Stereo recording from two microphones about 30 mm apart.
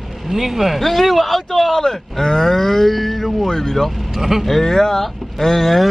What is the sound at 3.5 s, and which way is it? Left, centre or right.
Speech, centre.